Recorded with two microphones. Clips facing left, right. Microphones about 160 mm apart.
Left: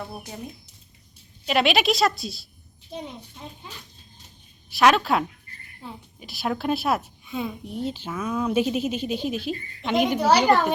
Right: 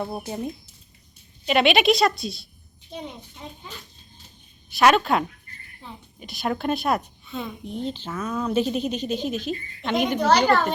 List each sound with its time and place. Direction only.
0.1 s speech: 25° right (ahead or behind)
1.5 s a woman's voice: centre (ahead or behind)
4.7 s a woman's voice: centre (ahead or behind)